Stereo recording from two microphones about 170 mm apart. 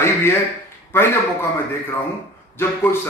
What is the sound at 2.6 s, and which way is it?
Speech, 15° left (ahead or behind).